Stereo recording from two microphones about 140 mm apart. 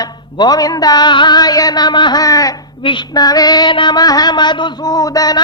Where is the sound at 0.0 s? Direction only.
30° left (ahead or behind).